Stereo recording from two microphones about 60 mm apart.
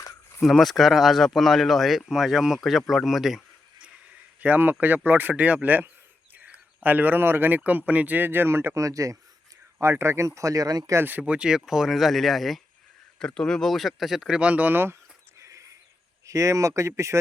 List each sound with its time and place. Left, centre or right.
0.4 s speech: centre
4.4 s speech: right
6.3 s a sound: right
6.8 s speech: right
7.6 s speech: right
8.7 s speech: right
9.8 s speech: right
11.2 s speech: centre
13.1 s speech: centre
14.4 s speech: right
15.4 s a sound: right
16.2 s speech: right